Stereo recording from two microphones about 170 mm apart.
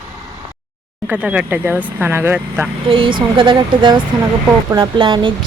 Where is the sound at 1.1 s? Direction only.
5° right (ahead or behind).